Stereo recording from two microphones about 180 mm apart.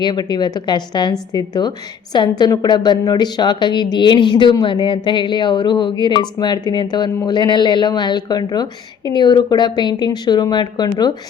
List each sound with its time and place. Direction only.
0.0 s a woman's voice: 25° left (ahead or behind)